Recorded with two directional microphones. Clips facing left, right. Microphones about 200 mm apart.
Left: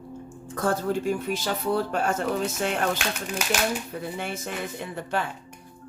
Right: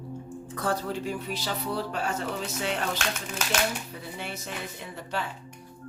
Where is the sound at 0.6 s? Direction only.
50° left (ahead or behind).